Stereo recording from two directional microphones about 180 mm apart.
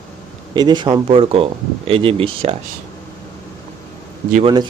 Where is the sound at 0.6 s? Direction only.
25° right (ahead or behind).